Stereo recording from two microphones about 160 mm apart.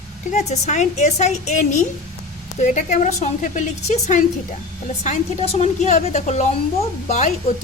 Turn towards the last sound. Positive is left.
turn(degrees=45)  # may be behind; listen again after turning